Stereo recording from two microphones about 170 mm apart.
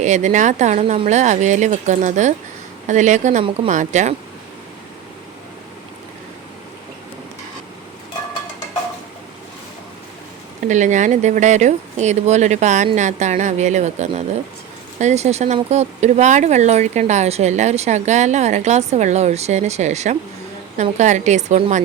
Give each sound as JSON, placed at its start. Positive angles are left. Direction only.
{"t": 0.0, "sound": "speech", "side_deg": -45}
{"t": 10.7, "sound": "speech", "side_deg": -45}